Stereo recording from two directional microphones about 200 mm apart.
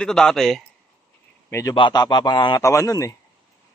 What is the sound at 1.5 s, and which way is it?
A man's voice, 15° left (ahead or behind).